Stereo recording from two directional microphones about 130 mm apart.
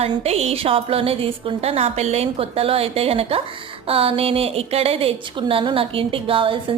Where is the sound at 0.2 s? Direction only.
55° right (ahead or behind).